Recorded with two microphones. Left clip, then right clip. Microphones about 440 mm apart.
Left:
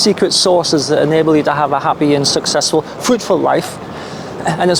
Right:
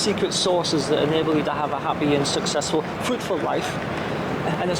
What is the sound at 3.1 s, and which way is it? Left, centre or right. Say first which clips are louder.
Speech: left 15 dB; left.